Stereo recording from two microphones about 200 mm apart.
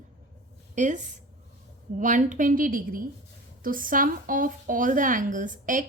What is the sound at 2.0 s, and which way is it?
A woman's voice, 40° right (ahead or behind).